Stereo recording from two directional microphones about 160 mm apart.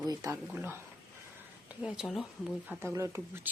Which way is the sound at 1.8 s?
5° right (ahead or behind).